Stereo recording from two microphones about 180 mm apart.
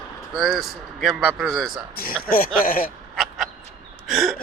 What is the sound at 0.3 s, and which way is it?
Speech, centre (ahead or behind).